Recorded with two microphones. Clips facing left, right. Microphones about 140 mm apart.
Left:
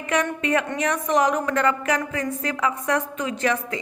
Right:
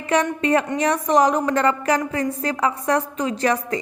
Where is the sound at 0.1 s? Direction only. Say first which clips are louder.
Right 4 dB; 35° right (ahead or behind).